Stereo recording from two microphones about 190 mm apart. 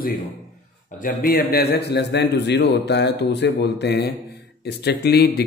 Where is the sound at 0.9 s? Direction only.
50° left (ahead or behind).